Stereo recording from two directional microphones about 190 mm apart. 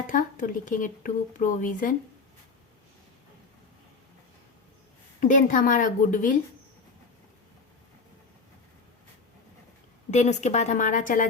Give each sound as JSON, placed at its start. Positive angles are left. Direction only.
{"t": 0.1, "sound": "speech", "side_deg": 45}
{"t": 5.2, "sound": "speech", "side_deg": 45}
{"t": 10.1, "sound": "a woman's voice", "side_deg": 35}